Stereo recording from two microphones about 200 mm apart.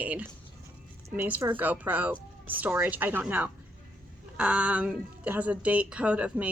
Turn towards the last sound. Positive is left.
turn(degrees=-5)  # may be behind; listen again after turning